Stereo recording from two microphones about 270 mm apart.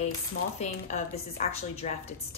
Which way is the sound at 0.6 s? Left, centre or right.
Left.